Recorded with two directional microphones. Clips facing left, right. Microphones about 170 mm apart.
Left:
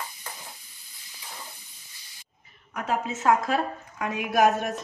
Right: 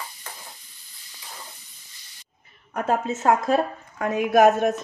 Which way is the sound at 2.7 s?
50° right (ahead or behind).